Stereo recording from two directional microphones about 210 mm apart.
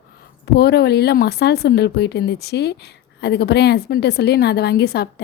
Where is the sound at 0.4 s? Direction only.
50° left (ahead or behind).